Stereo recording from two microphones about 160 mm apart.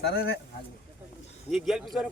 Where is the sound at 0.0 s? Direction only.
75° left (ahead or behind).